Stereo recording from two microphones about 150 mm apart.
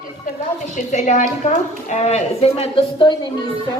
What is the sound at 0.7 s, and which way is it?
A woman's voice, 55° left (ahead or behind).